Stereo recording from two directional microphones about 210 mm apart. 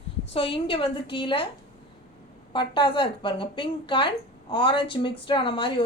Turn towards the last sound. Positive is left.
turn(degrees=25)  # may be behind; listen again after turning